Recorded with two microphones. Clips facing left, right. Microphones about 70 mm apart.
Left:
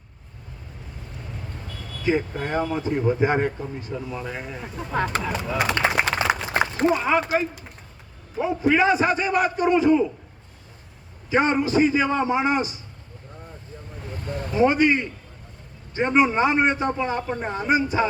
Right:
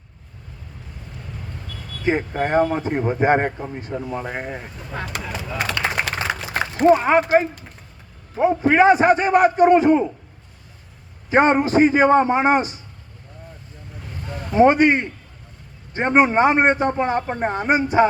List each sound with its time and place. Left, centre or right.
2.0 s a man's voice: right
5.5 s speech: centre
6.1 s a sound: centre
6.8 s a man's voice: right
11.3 s a man's voice: right
14.5 s a man's voice: right